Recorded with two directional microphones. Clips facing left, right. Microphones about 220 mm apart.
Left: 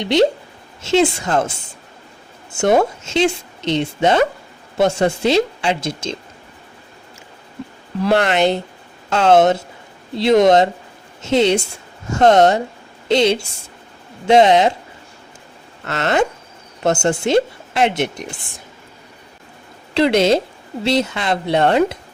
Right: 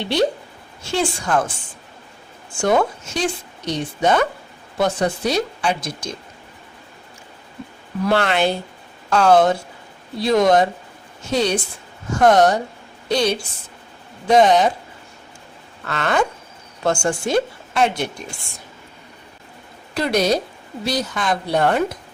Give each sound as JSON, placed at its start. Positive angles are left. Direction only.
{"t": 0.0, "sound": "speech", "side_deg": 20}
{"t": 8.0, "sound": "speech", "side_deg": 20}
{"t": 15.8, "sound": "speech", "side_deg": 25}
{"t": 19.9, "sound": "speech", "side_deg": 25}